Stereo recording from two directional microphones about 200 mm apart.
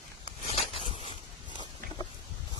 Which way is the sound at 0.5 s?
25° left (ahead or behind).